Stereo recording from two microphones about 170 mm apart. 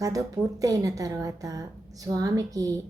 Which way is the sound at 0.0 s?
20° right (ahead or behind).